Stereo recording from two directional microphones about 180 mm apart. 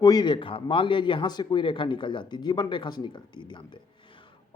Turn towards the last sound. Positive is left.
turn(degrees=25)  # may be behind; listen again after turning